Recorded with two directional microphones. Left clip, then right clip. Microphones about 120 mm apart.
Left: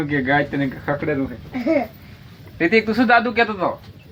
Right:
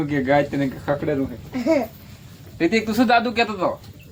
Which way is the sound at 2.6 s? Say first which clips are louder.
Left 3 dB; 20° left (ahead or behind).